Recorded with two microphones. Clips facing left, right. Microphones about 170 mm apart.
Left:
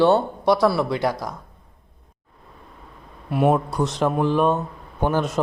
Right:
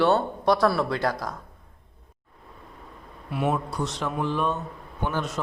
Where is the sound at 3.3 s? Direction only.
50° left (ahead or behind).